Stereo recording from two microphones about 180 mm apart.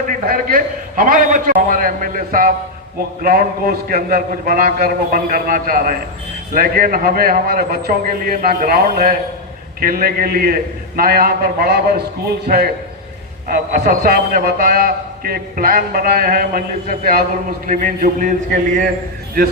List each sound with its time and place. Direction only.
0.3 s a man's voice: 50° right (ahead or behind)